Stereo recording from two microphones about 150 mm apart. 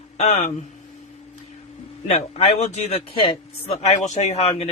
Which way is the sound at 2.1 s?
45° left (ahead or behind).